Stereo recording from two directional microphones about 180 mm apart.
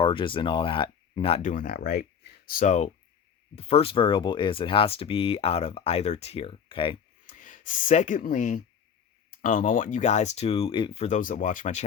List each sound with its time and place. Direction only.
0.0 s speech: 30° left (ahead or behind)
7.3 s speech: 45° left (ahead or behind)